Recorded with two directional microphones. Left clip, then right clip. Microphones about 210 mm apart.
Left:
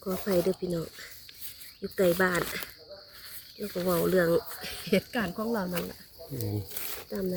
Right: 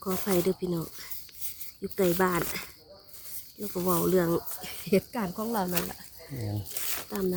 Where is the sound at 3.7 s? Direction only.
40° right (ahead or behind).